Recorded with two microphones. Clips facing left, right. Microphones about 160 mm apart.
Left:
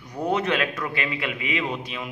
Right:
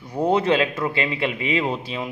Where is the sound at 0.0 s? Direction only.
30° right (ahead or behind).